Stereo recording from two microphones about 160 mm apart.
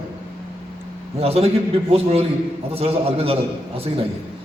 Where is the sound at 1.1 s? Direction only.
40° right (ahead or behind).